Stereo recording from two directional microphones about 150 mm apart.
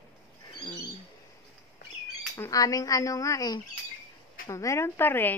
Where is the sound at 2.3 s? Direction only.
25° left (ahead or behind).